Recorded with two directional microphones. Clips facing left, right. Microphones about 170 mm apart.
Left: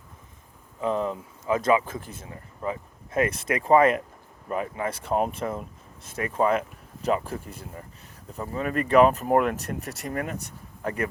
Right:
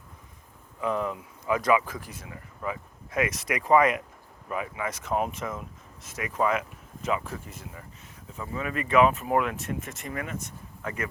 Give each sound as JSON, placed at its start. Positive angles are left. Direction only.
{"t": 0.8, "sound": "speech", "side_deg": 30}